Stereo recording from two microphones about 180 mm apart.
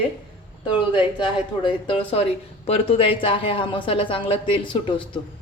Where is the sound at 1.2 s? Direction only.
25° left (ahead or behind).